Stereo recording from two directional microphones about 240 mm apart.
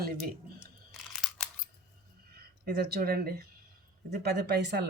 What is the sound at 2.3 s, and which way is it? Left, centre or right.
Speech, right.